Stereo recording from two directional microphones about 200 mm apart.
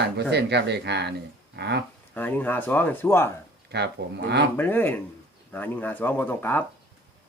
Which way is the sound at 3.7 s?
55° right (ahead or behind).